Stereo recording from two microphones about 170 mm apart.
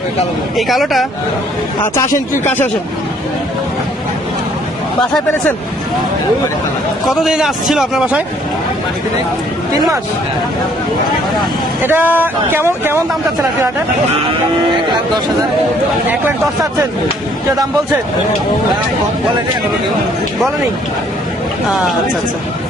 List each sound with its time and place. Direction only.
0.5 s a man's voice: centre (ahead or behind)
2.1 s speech: 50° left (ahead or behind)
7.0 s a man's voice: centre (ahead or behind)
11.8 s speech: 10° right (ahead or behind)